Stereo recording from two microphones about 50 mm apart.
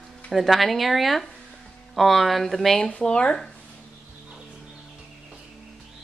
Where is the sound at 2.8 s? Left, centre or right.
Left.